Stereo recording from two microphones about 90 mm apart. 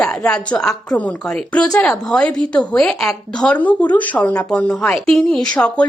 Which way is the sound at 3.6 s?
20° left (ahead or behind).